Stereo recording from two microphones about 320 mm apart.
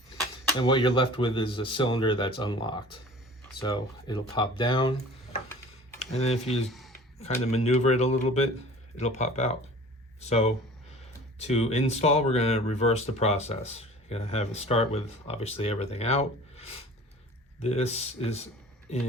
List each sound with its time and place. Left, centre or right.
0.6 s speech: centre
6.7 s a sound: centre
7.5 s speech: centre